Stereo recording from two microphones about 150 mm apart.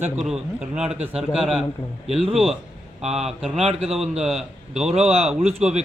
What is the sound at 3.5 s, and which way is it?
Speech, 40° right (ahead or behind).